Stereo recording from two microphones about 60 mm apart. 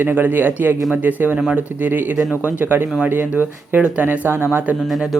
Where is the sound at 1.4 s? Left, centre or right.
Centre.